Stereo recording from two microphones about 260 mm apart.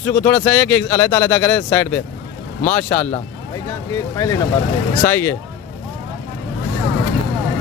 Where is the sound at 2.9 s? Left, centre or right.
Left.